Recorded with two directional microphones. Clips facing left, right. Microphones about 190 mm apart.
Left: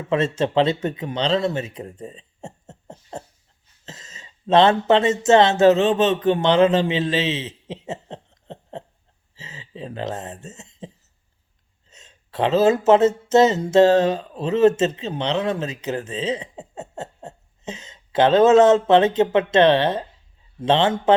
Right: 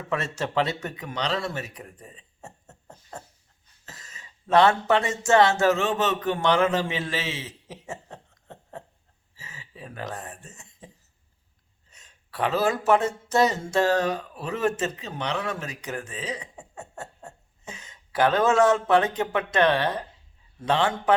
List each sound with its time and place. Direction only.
0.1 s speech: 25° left (ahead or behind)
9.3 s a sound: 20° left (ahead or behind)
11.9 s speech: 25° left (ahead or behind)